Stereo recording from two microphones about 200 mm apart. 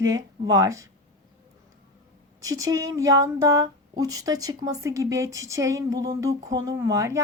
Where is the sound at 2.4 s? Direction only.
15° right (ahead or behind).